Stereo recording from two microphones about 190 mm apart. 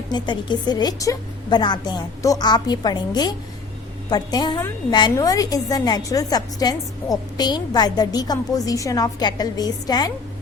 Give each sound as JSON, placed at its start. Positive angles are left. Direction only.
{"t": 0.1, "sound": "a woman's voice", "side_deg": 25}